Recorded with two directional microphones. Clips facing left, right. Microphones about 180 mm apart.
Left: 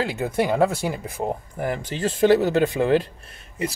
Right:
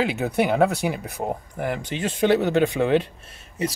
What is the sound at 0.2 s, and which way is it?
Speech, centre (ahead or behind).